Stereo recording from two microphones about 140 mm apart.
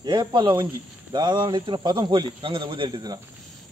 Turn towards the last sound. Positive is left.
turn(degrees=-30)  # may be behind; listen again after turning